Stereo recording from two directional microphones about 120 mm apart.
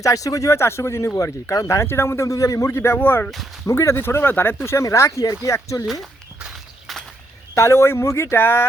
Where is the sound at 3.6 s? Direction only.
25° left (ahead or behind).